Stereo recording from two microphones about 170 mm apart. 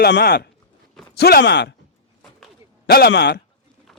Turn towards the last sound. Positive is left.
turn(degrees=80)